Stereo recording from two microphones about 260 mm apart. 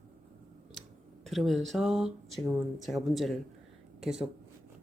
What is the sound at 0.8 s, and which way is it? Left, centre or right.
Speech, centre.